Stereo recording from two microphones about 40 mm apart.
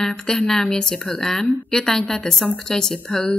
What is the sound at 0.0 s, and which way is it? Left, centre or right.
Speech, centre.